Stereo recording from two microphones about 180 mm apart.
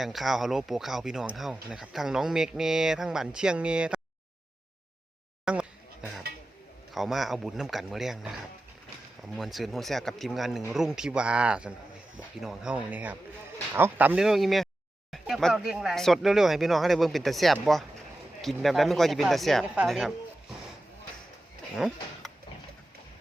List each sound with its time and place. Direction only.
0.0 s speech: centre (ahead or behind)
5.5 s a sound: 5° right (ahead or behind)
6.9 s speech: centre (ahead or behind)